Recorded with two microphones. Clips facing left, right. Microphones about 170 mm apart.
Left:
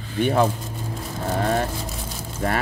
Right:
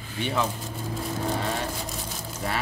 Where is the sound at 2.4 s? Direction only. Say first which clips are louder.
Left 6 dB; 55° left (ahead or behind).